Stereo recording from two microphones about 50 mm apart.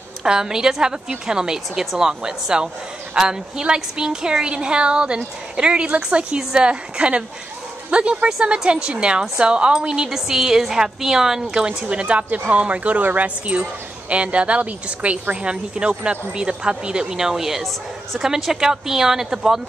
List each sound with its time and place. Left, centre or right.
0.2 s a woman's voice: centre